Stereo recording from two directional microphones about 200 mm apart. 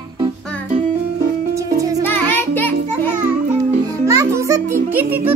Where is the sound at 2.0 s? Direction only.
10° left (ahead or behind).